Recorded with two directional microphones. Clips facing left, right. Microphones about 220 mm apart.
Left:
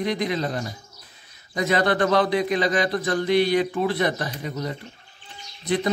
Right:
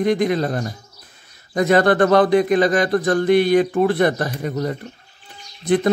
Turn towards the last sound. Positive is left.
turn(degrees=-50)  # may be behind; listen again after turning